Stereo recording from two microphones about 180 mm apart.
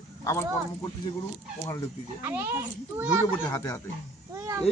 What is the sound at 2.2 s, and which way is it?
Speech, 15° right (ahead or behind).